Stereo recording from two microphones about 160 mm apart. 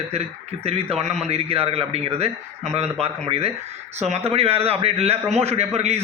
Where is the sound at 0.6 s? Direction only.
40° right (ahead or behind).